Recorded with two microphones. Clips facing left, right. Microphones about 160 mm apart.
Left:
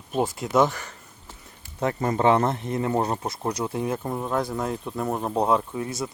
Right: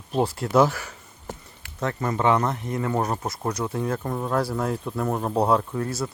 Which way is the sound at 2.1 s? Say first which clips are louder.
Left 1 dB; 35° left (ahead or behind).